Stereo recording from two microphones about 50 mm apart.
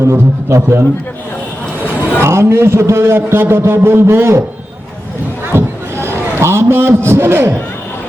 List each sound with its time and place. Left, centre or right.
0.0 s a man's voice: right
1.8 s a sound: left
2.2 s a man's voice: right
5.5 s a man's voice: right